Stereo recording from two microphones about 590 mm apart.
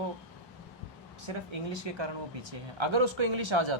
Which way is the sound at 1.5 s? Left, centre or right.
Right.